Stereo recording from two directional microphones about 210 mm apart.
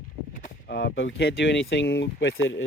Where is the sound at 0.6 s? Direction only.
55° left (ahead or behind).